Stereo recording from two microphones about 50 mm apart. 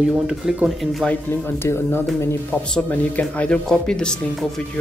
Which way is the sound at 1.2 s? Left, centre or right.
Left.